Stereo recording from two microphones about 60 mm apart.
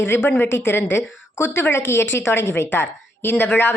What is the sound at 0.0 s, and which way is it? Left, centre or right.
A woman's voice, left.